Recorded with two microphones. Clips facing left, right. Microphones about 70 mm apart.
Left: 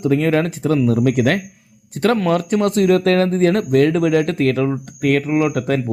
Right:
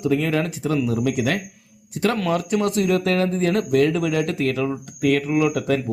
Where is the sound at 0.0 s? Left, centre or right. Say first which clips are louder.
Left 5 dB; left.